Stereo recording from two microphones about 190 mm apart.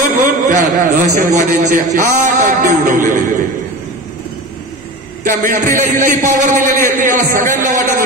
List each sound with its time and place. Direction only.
0.5 s a man's voice: 40° right (ahead or behind)
5.2 s a man's voice: 45° right (ahead or behind)